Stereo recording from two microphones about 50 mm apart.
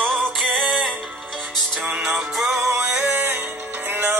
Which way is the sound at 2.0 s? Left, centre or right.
Centre.